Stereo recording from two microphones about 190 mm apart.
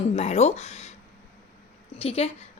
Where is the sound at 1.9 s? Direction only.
30° left (ahead or behind).